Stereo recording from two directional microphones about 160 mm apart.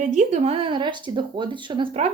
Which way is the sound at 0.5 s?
30° right (ahead or behind).